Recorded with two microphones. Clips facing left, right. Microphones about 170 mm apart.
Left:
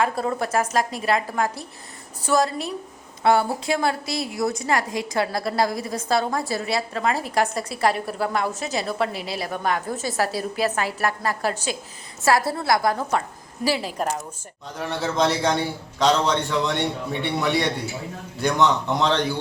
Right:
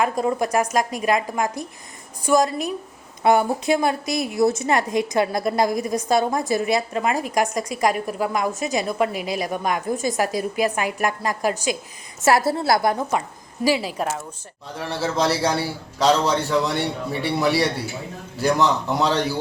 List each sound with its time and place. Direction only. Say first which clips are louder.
0.0 s a woman's voice: right 2 dB; 15° right (ahead or behind)
12.2 s a woman's voice: right 2 dB; 25° right (ahead or behind)
14.8 s a man's voice: even; centre (ahead or behind)